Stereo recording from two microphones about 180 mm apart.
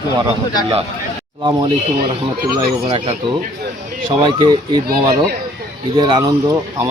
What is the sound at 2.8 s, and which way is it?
Speech, 30° right (ahead or behind).